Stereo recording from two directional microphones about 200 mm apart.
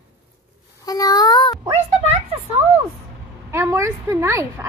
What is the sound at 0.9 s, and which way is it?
Speech, 20° left (ahead or behind).